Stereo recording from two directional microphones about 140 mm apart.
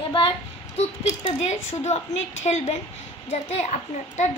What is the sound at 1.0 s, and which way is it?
A woman's voice, 55° left (ahead or behind).